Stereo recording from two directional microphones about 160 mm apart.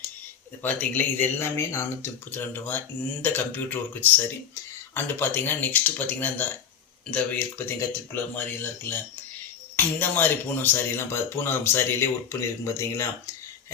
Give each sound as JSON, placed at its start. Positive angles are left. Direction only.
{"t": 0.6, "sound": "speech", "side_deg": 10}